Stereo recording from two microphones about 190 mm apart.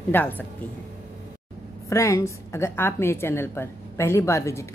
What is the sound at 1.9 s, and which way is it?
A woman's voice, 15° left (ahead or behind).